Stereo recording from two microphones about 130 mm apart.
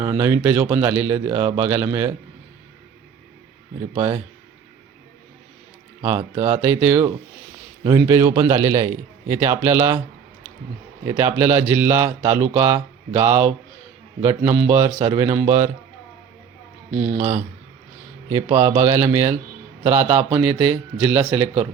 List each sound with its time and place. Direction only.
0.0 s speech: 20° right (ahead or behind)
3.9 s speech: 20° right (ahead or behind)
6.0 s speech: 20° right (ahead or behind)
11.0 s speech: 30° right (ahead or behind)
11.3 s speech: 15° right (ahead or behind)
17.2 s speech: 25° right (ahead or behind)